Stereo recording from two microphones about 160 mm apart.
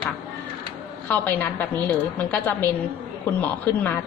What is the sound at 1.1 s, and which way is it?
A woman's voice, 10° left (ahead or behind).